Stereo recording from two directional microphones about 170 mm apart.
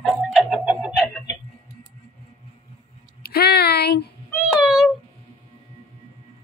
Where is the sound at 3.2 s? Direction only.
70° left (ahead or behind).